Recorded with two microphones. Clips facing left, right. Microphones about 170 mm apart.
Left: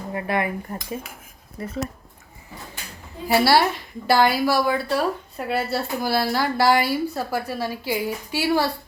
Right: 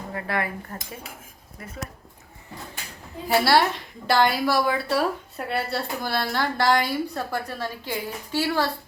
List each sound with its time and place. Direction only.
0.1 s speech: 20° left (ahead or behind)
1.6 s speech: 30° left (ahead or behind)
3.2 s a woman's voice: 5° left (ahead or behind)